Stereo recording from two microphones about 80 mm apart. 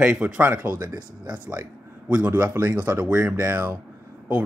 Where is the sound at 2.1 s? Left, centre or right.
Right.